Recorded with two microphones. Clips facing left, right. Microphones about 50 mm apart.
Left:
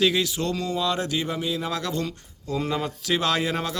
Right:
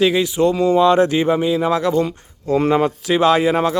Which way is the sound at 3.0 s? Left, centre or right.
Centre.